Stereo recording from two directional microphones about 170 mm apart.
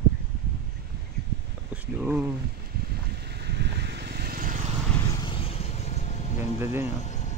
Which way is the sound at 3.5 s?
75° right (ahead or behind).